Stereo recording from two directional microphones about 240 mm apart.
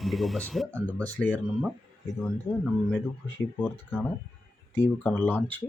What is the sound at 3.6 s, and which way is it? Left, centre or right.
Speech, centre.